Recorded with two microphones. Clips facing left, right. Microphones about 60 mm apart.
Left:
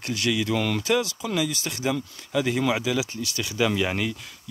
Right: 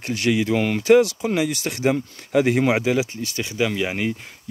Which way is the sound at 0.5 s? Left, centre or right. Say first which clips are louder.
Right 8 dB; right.